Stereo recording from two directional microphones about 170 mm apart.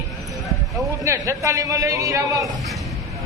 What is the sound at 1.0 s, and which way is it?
Speech, 20° right (ahead or behind).